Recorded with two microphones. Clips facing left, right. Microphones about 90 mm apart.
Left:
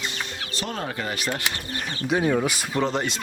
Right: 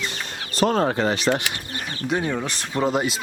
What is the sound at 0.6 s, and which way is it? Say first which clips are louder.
Speech: right 11 dB; 45° right (ahead or behind).